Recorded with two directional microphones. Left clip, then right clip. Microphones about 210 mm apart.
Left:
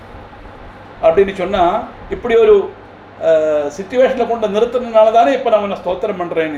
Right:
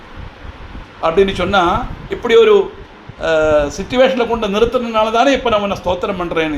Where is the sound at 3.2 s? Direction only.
15° right (ahead or behind).